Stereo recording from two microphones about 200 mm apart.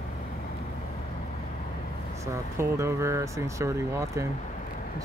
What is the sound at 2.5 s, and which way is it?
Speech, 15° right (ahead or behind).